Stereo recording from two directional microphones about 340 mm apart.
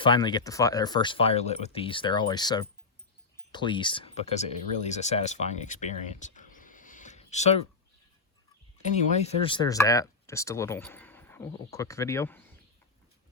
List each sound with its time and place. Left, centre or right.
0.0 s speech: centre
8.8 s speech: centre